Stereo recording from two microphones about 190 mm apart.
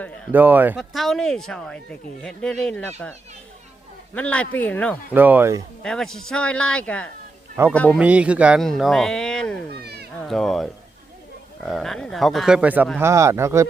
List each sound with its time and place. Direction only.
0.3 s speech: 10° right (ahead or behind)
0.8 s speech: centre (ahead or behind)
4.1 s speech: 5° left (ahead or behind)
5.1 s speech: 10° right (ahead or behind)
5.8 s speech: 5° left (ahead or behind)
7.9 s speech: 5° right (ahead or behind)
9.8 s cat: 60° right (ahead or behind)
10.2 s speech: centre (ahead or behind); by 13.7 s 15° right (ahead or behind)